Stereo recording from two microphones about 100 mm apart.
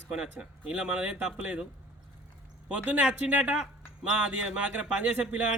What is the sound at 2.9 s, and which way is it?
Speech, 15° right (ahead or behind).